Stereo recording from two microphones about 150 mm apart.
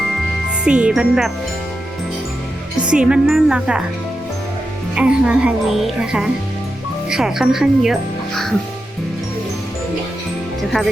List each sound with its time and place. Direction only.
0.6 s speech: 5° right (ahead or behind)
2.8 s speech: 5° right (ahead or behind)
4.9 s speech: 5° right (ahead or behind)
10.6 s music: centre (ahead or behind)